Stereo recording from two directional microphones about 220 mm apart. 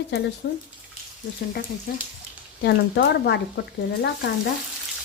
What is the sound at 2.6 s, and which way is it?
Speech, 50° left (ahead or behind).